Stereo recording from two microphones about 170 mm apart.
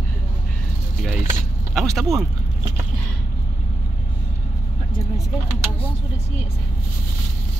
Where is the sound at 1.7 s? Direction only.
Centre (ahead or behind).